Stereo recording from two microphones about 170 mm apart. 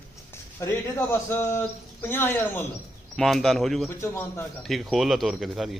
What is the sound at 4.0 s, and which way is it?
Speech, 15° left (ahead or behind).